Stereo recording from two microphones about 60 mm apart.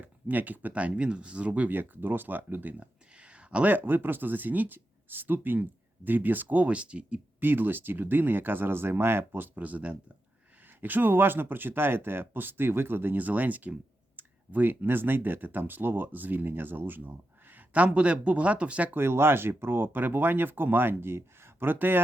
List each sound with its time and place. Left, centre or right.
0.0 s speech: right
3.8 s speech: right
7.4 s speech: right
17.7 s speech: centre
18.9 s speech: right